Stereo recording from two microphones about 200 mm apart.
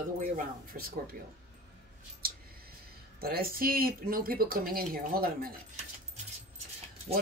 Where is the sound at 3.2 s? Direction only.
50° right (ahead or behind).